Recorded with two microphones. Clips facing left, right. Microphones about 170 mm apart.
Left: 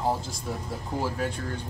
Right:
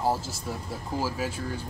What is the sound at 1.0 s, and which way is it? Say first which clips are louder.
Speech: left 1 dB; 5° right (ahead or behind).